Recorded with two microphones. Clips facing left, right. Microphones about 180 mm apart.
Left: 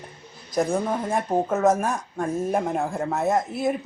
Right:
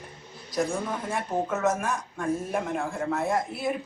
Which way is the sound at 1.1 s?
35° left (ahead or behind).